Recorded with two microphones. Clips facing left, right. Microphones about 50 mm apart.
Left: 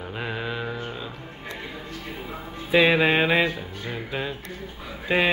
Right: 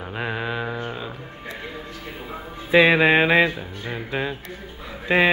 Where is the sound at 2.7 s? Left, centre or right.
Centre.